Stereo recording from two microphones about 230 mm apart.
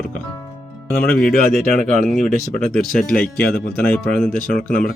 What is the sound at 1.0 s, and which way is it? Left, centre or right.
Speech, left.